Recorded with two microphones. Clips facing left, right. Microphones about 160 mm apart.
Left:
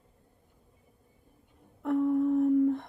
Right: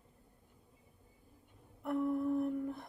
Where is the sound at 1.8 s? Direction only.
90° left.